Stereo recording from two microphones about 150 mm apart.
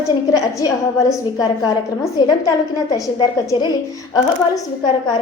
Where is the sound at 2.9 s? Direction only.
30° left (ahead or behind).